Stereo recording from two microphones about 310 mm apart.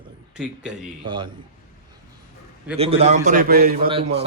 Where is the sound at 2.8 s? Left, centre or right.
Centre.